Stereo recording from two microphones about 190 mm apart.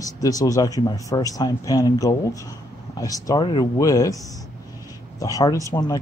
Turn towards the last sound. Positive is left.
turn(degrees=20)  # may be behind; listen again after turning